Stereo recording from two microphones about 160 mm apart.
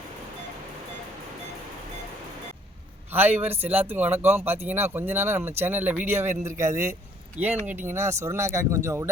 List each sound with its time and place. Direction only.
3.1 s speech: 15° right (ahead or behind)